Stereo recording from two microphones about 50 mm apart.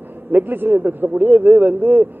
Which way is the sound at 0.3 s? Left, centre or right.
Right.